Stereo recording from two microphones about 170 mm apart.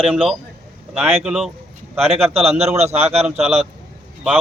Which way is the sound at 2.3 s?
35° right (ahead or behind).